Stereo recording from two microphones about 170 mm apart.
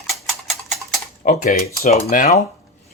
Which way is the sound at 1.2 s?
55° left (ahead or behind).